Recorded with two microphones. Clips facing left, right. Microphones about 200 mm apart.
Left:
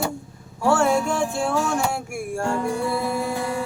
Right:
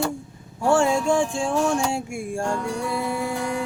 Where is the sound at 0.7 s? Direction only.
15° right (ahead or behind).